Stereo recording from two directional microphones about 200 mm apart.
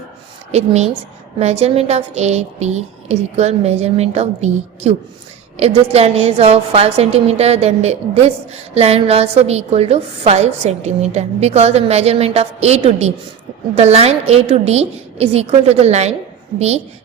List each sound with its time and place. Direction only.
0.5 s a woman's voice: 35° right (ahead or behind)